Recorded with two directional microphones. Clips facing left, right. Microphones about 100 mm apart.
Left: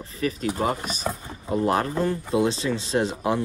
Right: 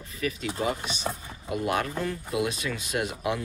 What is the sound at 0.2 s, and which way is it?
Speech, 35° left (ahead or behind).